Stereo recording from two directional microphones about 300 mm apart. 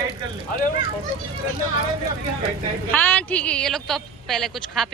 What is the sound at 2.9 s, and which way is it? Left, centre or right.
Speech, centre.